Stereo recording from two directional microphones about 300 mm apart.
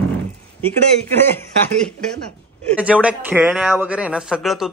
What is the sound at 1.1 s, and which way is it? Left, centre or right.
A man's voice, centre.